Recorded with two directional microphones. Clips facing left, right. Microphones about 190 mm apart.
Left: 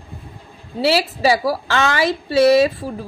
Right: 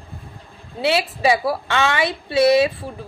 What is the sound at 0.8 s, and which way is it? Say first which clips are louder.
A woman's voice: left 2 dB; 35° left (ahead or behind).